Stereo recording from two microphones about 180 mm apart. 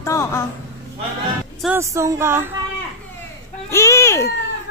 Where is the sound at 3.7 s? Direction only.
15° left (ahead or behind).